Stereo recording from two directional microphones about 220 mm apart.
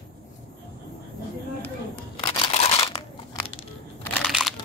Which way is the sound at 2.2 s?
25° left (ahead or behind).